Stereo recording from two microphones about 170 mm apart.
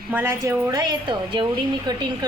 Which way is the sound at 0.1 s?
15° right (ahead or behind).